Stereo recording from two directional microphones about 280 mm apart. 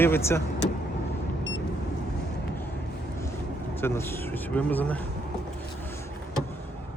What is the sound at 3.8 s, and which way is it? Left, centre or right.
Speech, centre.